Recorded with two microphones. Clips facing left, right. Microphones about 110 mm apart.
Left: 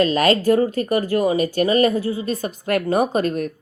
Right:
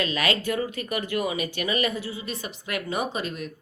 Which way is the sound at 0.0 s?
40° left (ahead or behind).